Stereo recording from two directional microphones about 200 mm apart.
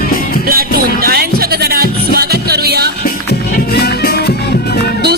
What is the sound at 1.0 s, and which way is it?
Music, 50° right (ahead or behind).